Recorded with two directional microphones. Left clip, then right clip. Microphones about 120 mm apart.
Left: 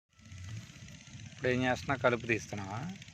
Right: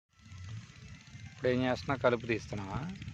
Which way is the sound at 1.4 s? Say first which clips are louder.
Even; 25° right (ahead or behind).